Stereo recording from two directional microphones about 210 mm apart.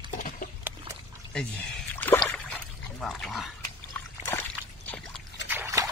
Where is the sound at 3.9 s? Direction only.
5° left (ahead or behind).